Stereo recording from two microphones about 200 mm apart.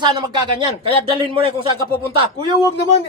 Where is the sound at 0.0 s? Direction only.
20° right (ahead or behind).